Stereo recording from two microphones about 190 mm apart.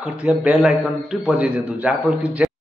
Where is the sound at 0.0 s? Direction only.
5° right (ahead or behind).